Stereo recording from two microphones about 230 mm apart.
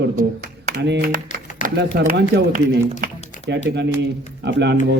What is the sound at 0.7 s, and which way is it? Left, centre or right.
Speech, right.